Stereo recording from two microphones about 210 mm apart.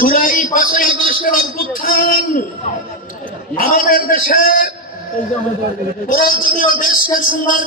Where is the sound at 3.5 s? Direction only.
40° left (ahead or behind).